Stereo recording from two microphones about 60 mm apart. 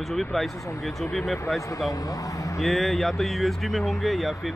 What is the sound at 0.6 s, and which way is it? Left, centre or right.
Speech, left.